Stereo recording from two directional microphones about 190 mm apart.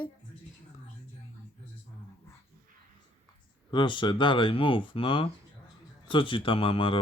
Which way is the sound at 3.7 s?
25° left (ahead or behind).